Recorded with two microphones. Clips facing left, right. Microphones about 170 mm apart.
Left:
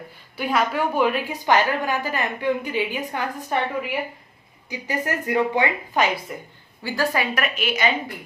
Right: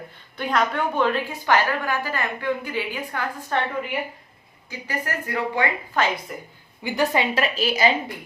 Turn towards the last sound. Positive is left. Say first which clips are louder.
# right 2 dB
turn(degrees=-35)  # may be behind; listen again after turning